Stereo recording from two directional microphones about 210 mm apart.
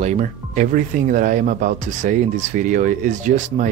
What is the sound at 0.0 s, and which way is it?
Speech, 35° right (ahead or behind).